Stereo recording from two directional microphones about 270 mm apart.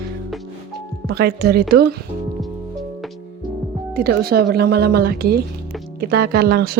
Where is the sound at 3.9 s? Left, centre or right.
Right.